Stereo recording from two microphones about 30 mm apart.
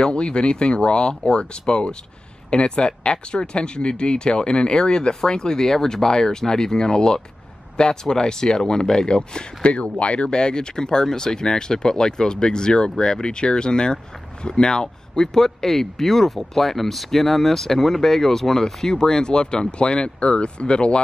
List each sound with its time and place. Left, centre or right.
0.0 s speech: left
9.7 s speech: left